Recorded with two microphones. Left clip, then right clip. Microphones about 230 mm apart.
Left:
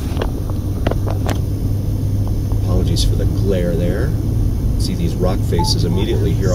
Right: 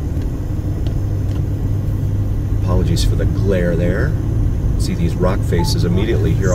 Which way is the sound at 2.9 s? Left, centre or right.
Centre.